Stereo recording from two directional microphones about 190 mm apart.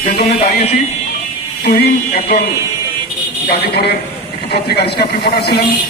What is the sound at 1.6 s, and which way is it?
Speech, 55° left (ahead or behind).